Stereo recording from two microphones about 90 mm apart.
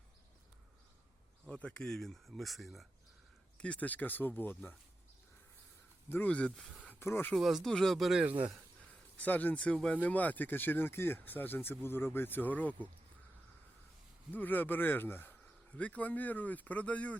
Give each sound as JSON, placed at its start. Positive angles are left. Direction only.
{"t": 1.5, "sound": "speech", "side_deg": 15}
{"t": 3.6, "sound": "speech", "side_deg": 15}
{"t": 6.1, "sound": "speech", "side_deg": 20}
{"t": 7.0, "sound": "speech", "side_deg": 25}
{"t": 7.3, "sound": "speech", "side_deg": 0}
{"t": 8.2, "sound": "speech", "side_deg": -20}
{"t": 9.1, "sound": "speech", "side_deg": 15}
{"t": 14.3, "sound": "speech", "side_deg": 20}